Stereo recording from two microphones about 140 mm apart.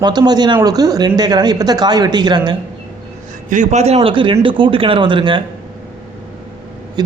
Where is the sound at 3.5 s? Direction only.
60° right (ahead or behind).